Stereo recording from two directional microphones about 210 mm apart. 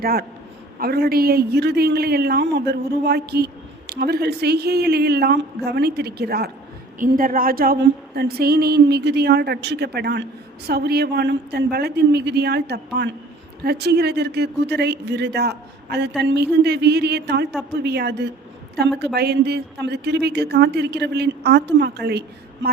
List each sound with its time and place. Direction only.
0.0 s a man's voice: 45° right (ahead or behind)